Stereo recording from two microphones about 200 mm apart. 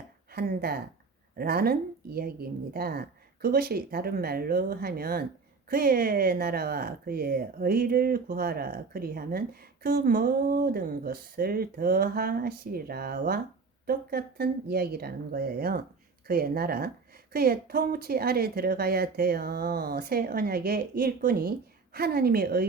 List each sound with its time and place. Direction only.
0.3 s speech: 50° right (ahead or behind)